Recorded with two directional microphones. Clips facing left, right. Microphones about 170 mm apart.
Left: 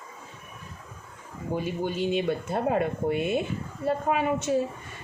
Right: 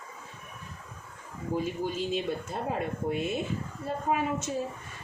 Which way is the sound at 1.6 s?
65° left (ahead or behind).